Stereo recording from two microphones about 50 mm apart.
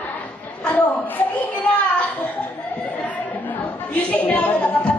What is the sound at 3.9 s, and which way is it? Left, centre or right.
Speech, left.